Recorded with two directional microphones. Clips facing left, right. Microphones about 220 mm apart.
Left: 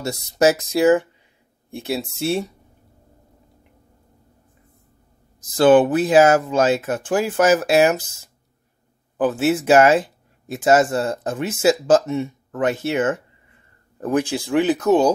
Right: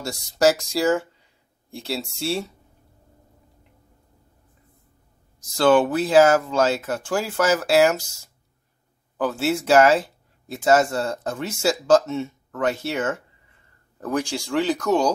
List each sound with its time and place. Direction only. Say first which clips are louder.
0.1 s speech: left 2 dB; 20° left (ahead or behind)
2.2 s speech: left 4 dB; 20° left (ahead or behind)
5.6 s speech: left 4 dB; 20° left (ahead or behind)
9.1 s speech: left 4 dB; 20° left (ahead or behind)